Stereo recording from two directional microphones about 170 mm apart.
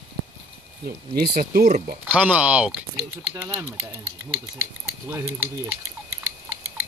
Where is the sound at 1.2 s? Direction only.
65° right (ahead or behind).